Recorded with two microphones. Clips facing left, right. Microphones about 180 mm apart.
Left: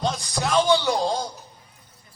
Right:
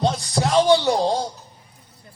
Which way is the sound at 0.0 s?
35° right (ahead or behind).